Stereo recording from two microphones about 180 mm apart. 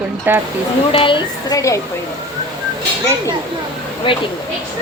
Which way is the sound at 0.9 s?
30° left (ahead or behind).